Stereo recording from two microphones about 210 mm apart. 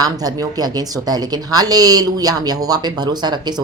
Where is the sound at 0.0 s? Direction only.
20° right (ahead or behind).